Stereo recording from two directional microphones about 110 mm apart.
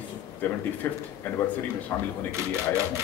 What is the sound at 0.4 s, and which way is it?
Speech, 15° left (ahead or behind).